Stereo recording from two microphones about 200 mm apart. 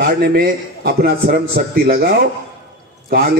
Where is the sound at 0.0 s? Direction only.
45° right (ahead or behind).